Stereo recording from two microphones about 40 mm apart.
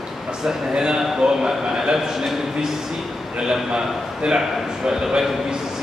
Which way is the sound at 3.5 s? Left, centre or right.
Centre.